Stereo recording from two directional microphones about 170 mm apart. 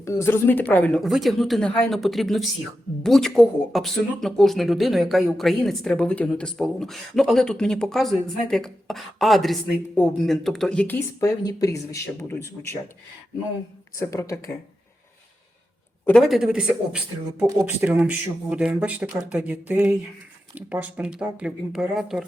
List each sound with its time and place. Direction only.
0.0 s speech: 15° left (ahead or behind)
13.9 s speech: 20° left (ahead or behind)
16.0 s speech: centre (ahead or behind)